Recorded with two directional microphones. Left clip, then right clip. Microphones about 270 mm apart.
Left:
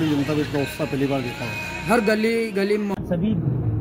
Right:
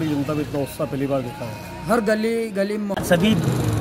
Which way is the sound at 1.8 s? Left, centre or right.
Right.